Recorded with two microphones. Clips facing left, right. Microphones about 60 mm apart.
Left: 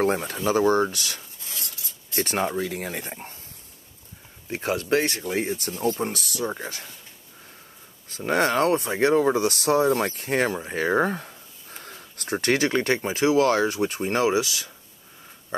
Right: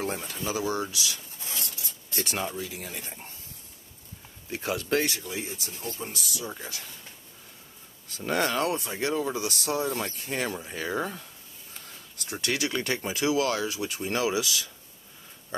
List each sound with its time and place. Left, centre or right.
0.0 s speech: left
1.4 s filing: right
2.1 s speech: left
4.5 s speech: left
8.3 s speech: left
10.0 s speech: left